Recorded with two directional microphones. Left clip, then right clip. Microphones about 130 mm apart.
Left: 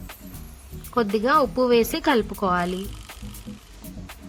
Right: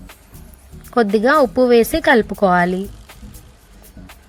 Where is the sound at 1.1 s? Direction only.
35° right (ahead or behind).